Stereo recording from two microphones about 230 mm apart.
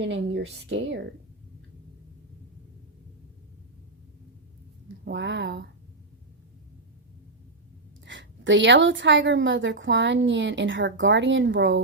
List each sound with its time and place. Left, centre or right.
0.0 s a woman's voice: right
5.0 s a woman's voice: right
8.0 s a woman's voice: right